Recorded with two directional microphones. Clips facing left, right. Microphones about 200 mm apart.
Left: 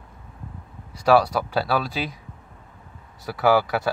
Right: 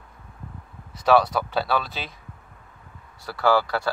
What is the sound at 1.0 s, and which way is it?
Speech, 5° left (ahead or behind).